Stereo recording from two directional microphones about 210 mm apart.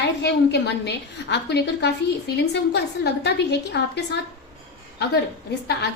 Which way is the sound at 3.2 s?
55° left (ahead or behind).